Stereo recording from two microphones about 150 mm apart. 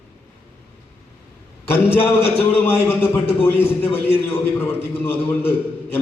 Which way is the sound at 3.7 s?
40° left (ahead or behind).